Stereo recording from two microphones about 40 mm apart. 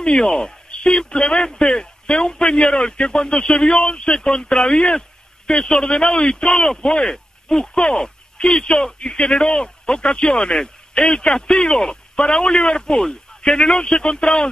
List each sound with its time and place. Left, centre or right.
0.0 s speech: centre
0.3 s speech: centre
0.7 s speech: left